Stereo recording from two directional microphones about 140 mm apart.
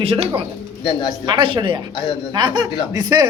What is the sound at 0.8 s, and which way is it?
Speech, 30° left (ahead or behind).